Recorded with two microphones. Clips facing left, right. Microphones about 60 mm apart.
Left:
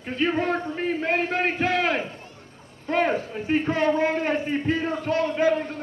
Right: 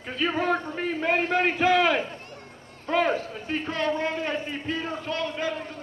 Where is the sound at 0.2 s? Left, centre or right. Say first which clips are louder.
Left 1 dB; centre.